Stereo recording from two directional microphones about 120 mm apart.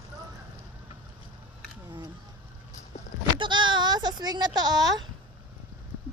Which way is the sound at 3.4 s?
40° right (ahead or behind).